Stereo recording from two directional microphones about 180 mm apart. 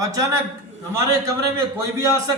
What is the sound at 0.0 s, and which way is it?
Speech, 20° right (ahead or behind).